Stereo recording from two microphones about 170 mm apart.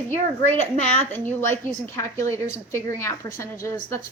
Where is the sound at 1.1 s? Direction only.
10° left (ahead or behind).